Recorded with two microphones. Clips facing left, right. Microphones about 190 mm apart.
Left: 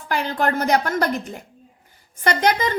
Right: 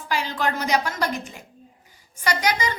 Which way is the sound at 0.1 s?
55° left (ahead or behind).